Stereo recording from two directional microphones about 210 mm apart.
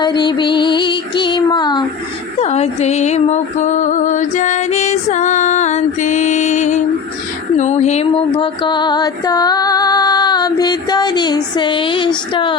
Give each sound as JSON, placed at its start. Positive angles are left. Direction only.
{"t": 0.0, "sound": "music", "side_deg": 20}
{"t": 2.4, "sound": "music", "side_deg": 30}